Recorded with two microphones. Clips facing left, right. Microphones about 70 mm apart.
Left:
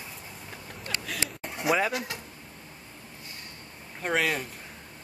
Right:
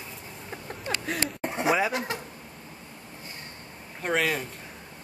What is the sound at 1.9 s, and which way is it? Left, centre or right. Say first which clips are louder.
Speech: right 3 dB; right.